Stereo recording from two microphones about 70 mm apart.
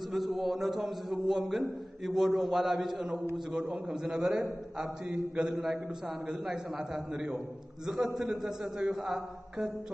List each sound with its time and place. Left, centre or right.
0.1 s a man's voice: centre